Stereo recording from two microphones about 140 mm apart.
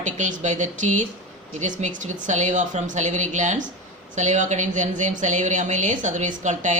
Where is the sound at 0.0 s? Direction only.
60° right (ahead or behind).